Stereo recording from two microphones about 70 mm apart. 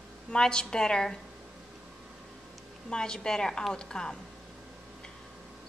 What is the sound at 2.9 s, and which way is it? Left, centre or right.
A woman's voice, centre.